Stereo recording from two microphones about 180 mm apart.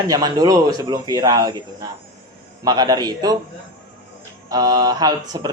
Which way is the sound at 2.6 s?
20° right (ahead or behind).